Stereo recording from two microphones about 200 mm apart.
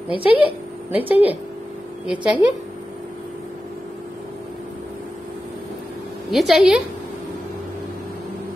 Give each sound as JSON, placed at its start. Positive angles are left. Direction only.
{"t": 0.1, "sound": "a woman's voice", "side_deg": 25}
{"t": 0.9, "sound": "speech", "side_deg": -10}
{"t": 6.3, "sound": "a woman's voice", "side_deg": 0}